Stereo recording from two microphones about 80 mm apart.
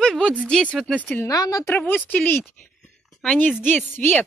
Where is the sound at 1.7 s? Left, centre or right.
Left.